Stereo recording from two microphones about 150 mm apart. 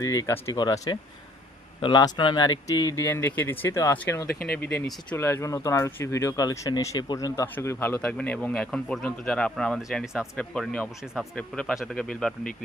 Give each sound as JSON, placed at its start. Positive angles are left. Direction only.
{"t": 0.0, "sound": "speech", "side_deg": 25}
{"t": 4.3, "sound": "speech", "side_deg": 90}
{"t": 5.1, "sound": "speech", "side_deg": 15}